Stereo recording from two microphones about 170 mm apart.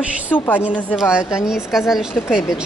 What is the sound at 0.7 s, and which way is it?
Speech, 10° left (ahead or behind).